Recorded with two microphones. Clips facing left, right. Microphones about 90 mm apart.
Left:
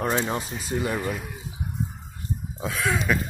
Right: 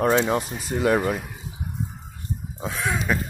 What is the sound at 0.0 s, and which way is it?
Speech, 70° right (ahead or behind).